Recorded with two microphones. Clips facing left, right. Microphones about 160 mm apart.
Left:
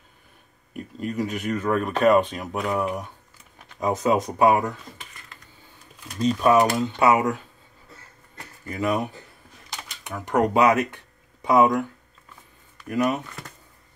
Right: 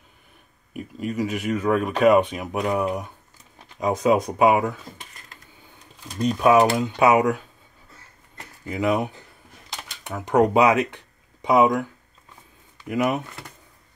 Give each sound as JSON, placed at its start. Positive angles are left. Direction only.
{"t": 0.7, "sound": "speech", "side_deg": -5}
{"t": 4.0, "sound": "speech", "side_deg": -10}
{"t": 6.2, "sound": "speech", "side_deg": -5}
{"t": 6.8, "sound": "speech", "side_deg": -15}
{"t": 8.6, "sound": "speech", "side_deg": -15}
{"t": 10.1, "sound": "speech", "side_deg": -15}
{"t": 12.8, "sound": "speech", "side_deg": -15}